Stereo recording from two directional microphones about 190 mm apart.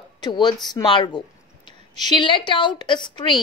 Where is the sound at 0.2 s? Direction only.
25° left (ahead or behind).